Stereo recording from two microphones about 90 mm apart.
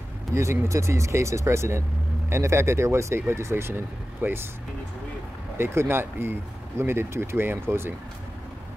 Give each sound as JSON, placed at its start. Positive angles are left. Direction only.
{"t": 0.3, "sound": "speech", "side_deg": -30}
{"t": 5.6, "sound": "speech", "side_deg": -25}